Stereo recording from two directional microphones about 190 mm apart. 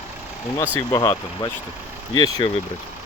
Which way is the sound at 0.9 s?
20° left (ahead or behind).